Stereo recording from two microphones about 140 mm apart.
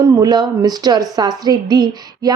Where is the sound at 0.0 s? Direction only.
30° right (ahead or behind).